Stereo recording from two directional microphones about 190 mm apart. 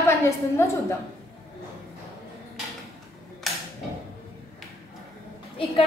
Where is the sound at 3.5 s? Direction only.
Centre (ahead or behind).